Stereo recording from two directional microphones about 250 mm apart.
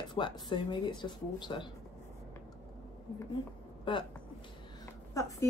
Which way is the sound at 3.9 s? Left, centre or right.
Centre.